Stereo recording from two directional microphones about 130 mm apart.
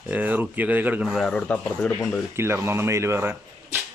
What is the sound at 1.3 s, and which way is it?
Speech, 10° left (ahead or behind).